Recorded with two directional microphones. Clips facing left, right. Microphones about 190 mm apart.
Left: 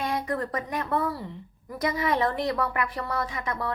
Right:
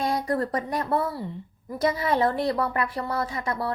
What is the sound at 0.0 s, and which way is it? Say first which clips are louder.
A woman's voice: right 3 dB; 35° right (ahead or behind).